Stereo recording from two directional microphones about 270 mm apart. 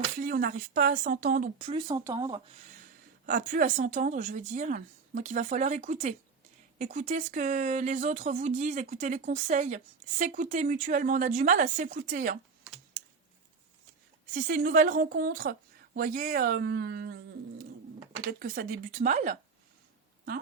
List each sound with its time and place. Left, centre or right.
0.2 s speech: right; by 2.4 s centre
3.2 s speech: right
14.3 s speech: right
18.3 s speech: right